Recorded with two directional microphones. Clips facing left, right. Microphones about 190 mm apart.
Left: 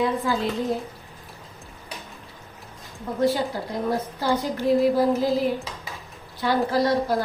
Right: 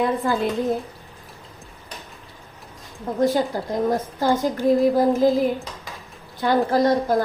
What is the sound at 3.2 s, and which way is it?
A woman's voice, 45° right (ahead or behind).